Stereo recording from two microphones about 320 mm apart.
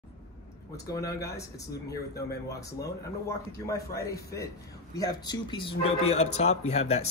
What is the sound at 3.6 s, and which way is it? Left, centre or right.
A man's voice, centre.